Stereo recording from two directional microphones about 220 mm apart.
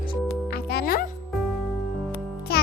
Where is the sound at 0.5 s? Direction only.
45° left (ahead or behind).